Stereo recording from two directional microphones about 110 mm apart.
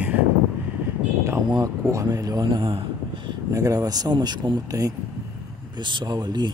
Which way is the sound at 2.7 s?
50° right (ahead or behind).